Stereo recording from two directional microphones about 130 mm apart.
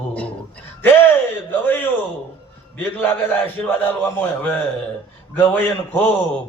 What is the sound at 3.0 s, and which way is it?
A man's voice, 15° left (ahead or behind).